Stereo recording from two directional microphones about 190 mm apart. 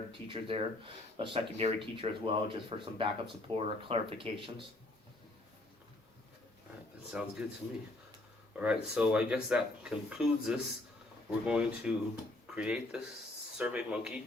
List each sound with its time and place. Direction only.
0.3 s speech: 25° right (ahead or behind)
7.1 s speech: 5° right (ahead or behind)
8.5 s speech: 5° right (ahead or behind)